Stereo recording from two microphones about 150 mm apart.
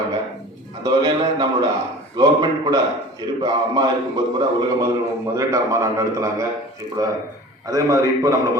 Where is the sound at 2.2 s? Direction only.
25° right (ahead or behind).